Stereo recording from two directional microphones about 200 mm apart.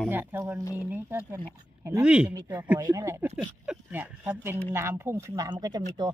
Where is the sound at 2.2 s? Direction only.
20° right (ahead or behind).